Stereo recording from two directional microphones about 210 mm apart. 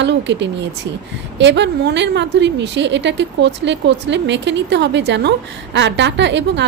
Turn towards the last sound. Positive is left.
turn(degrees=-55)  # may be behind; listen again after turning